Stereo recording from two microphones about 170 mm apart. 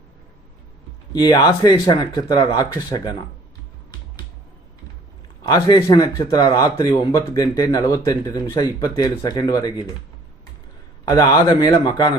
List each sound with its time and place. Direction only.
1.1 s speech: 25° left (ahead or behind)
5.4 s speech: 25° left (ahead or behind)
11.1 s speech: 20° left (ahead or behind)